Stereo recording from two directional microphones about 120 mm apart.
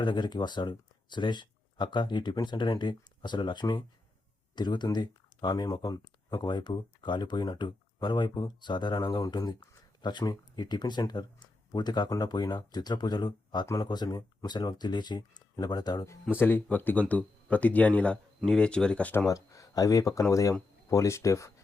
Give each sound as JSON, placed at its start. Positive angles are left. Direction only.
{"t": 0.0, "sound": "speech", "side_deg": 40}
{"t": 16.4, "sound": "speech", "side_deg": 15}
{"t": 19.3, "sound": "speech", "side_deg": 30}